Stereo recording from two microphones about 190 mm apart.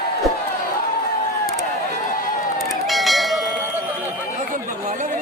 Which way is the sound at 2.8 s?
Centre (ahead or behind).